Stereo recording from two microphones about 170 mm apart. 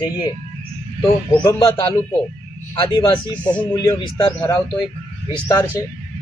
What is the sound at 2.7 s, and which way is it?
A man's voice, 25° left (ahead or behind).